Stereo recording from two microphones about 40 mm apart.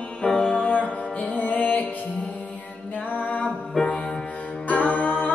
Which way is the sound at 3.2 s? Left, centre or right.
Left.